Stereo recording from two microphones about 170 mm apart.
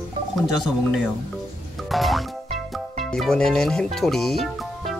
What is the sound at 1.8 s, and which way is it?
Music, centre (ahead or behind).